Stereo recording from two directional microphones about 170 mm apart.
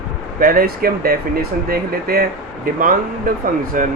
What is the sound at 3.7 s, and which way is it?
Speech, 50° right (ahead or behind).